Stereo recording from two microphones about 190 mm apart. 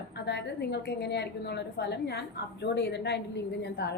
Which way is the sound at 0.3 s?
60° left (ahead or behind).